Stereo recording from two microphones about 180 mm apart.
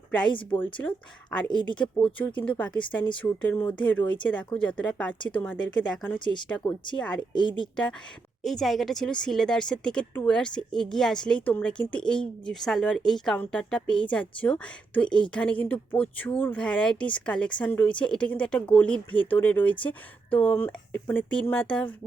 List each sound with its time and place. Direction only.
0.5 s a woman's voice: 10° left (ahead or behind)
6.1 s speech: 25° left (ahead or behind)
6.7 s a woman's voice: 5° left (ahead or behind)
8.4 s a woman's voice: centre (ahead or behind)